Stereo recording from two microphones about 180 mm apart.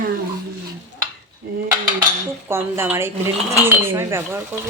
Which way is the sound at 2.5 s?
15° right (ahead or behind).